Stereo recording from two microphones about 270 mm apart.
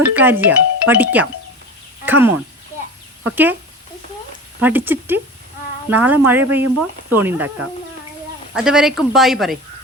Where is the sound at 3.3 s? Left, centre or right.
Centre.